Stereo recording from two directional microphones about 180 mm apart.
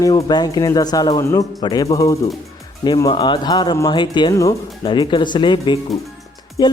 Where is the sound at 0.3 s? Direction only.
20° left (ahead or behind).